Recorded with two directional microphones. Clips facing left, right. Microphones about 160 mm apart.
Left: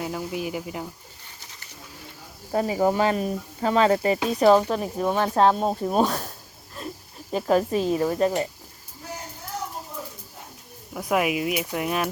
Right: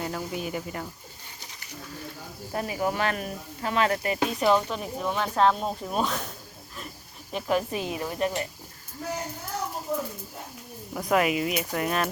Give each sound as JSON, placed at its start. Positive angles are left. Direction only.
{"t": 0.0, "sound": "speech", "side_deg": 5}
{"t": 2.5, "sound": "speech", "side_deg": 25}
{"t": 7.3, "sound": "speech", "side_deg": 35}
{"t": 10.9, "sound": "speech", "side_deg": 5}